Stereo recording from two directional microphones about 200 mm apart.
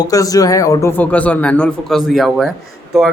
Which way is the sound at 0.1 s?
15° left (ahead or behind).